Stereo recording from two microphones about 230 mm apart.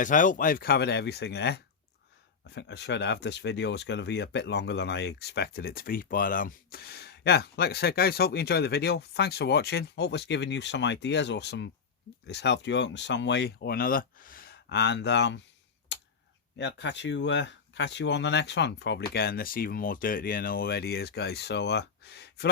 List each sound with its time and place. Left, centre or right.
0.0 s speech: left
15.9 s a sound: left
16.6 s speech: left